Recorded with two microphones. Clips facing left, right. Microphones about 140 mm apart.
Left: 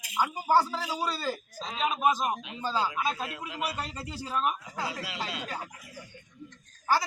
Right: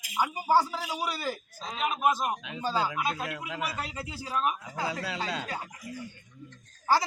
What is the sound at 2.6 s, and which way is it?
A man's voice, 10° right (ahead or behind).